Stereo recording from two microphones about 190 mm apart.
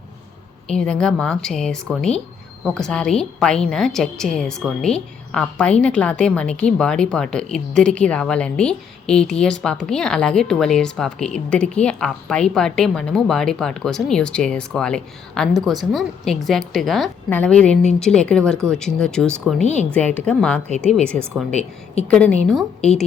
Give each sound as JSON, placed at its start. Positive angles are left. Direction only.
{"t": 0.7, "sound": "a woman's voice", "side_deg": 5}
{"t": 19.6, "sound": "a woman's voice", "side_deg": 35}
{"t": 19.9, "sound": "a woman's voice", "side_deg": 5}